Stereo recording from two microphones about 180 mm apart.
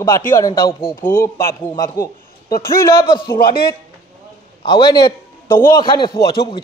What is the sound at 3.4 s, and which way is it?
Speech, 55° left (ahead or behind).